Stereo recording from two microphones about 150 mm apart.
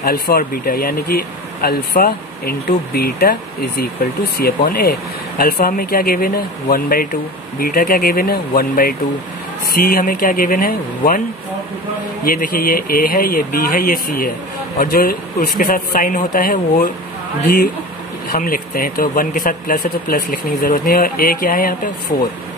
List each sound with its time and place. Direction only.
0.0 s speech: 90° left
4.4 s speech: 75° left (ahead or behind)
12.3 s speech: 75° left (ahead or behind)
18.3 s speech: 75° left (ahead or behind)